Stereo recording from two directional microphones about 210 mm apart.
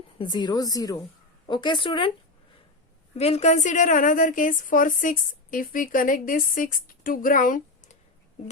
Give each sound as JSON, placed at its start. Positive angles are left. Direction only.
{"t": 0.2, "sound": "a woman's voice", "side_deg": 20}
{"t": 3.2, "sound": "a woman's voice", "side_deg": 30}